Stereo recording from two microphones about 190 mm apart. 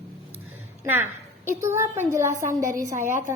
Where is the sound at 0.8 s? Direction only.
10° right (ahead or behind).